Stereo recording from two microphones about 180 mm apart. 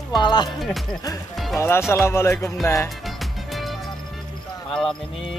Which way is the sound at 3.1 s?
Centre (ahead or behind).